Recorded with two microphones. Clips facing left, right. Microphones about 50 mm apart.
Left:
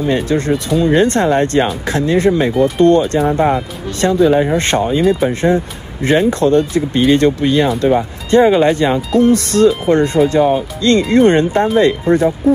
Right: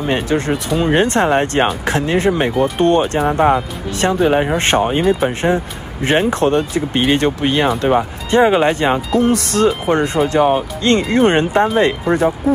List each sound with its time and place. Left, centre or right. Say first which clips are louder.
0.0 s speech: left 2 dB; right
4.0 s speech: left 3 dB; right
9.7 s speech: left 3 dB; right